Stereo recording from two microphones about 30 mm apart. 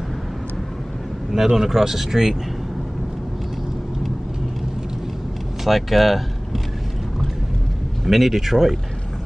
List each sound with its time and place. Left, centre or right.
1.3 s speech: centre
5.6 s speech: centre
8.0 s speech: centre